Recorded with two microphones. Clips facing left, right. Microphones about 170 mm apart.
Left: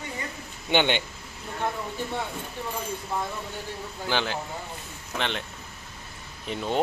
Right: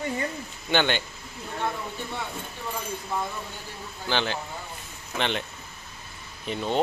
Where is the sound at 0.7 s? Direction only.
20° left (ahead or behind).